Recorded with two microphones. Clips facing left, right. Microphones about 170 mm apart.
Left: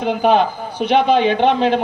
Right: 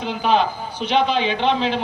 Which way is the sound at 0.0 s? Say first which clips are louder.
Left 4 dB; 55° left (ahead or behind).